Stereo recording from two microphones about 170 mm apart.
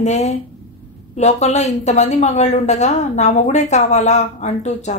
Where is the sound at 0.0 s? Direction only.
40° left (ahead or behind).